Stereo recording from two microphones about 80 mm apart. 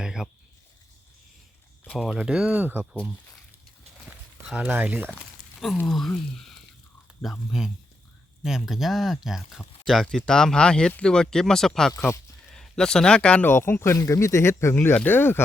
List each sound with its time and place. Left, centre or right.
0.0 s a sound: centre
2.1 s speech: centre
2.5 s speech: right
4.7 s speech: centre
5.8 s speech: centre
11.9 s speech: left
12.5 s speech: centre
13.5 s speech: left